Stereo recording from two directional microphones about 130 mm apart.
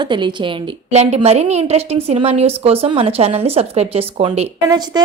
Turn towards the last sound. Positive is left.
turn(degrees=-30)  # may be behind; listen again after turning